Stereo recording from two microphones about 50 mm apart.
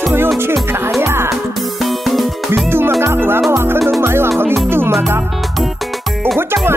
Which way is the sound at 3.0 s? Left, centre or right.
Right.